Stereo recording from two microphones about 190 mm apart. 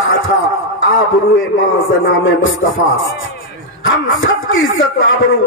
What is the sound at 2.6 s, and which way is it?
Speech, 90° left.